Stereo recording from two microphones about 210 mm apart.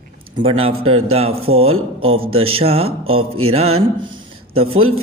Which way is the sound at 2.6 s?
30° right (ahead or behind).